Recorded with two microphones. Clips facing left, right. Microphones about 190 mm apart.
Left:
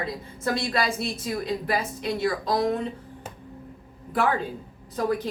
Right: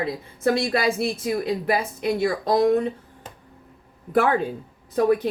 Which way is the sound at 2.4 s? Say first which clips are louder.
Right 8 dB; 45° right (ahead or behind).